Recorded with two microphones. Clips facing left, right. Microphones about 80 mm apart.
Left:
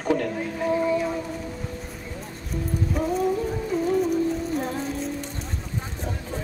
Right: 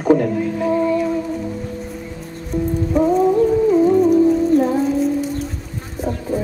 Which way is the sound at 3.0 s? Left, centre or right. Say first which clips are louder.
Right 11 dB; right.